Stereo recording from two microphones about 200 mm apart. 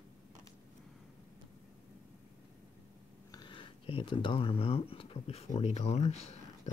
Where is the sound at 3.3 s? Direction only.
25° left (ahead or behind).